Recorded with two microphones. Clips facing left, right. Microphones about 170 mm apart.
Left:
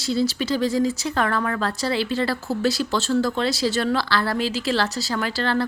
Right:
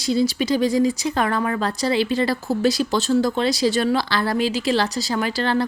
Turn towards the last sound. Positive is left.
turn(degrees=-15)  # may be behind; listen again after turning